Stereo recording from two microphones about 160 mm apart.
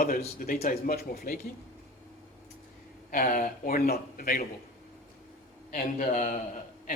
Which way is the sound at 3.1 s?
60° left (ahead or behind).